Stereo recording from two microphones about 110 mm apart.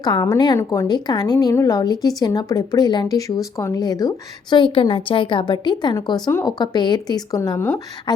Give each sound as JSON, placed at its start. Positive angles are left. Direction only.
{"t": 0.0, "sound": "a woman's voice", "side_deg": 35}